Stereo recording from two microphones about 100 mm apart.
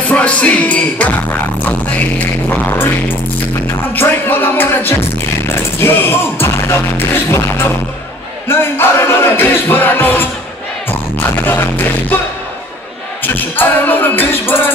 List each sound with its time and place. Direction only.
0.1 s music: 15° left (ahead or behind)
3.9 s music: 20° left (ahead or behind)
13.2 s music: 20° left (ahead or behind)